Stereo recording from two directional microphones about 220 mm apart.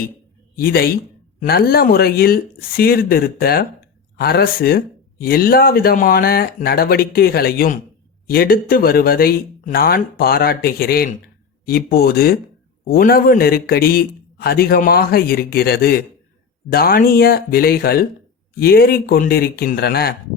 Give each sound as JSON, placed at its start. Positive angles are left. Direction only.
{"t": 0.5, "sound": "speech", "side_deg": 45}